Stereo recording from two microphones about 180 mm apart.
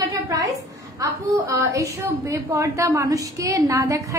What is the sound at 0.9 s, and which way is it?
A woman's voice, 20° right (ahead or behind).